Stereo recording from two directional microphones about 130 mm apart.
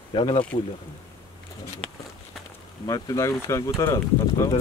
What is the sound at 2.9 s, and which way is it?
Speech, 25° left (ahead or behind).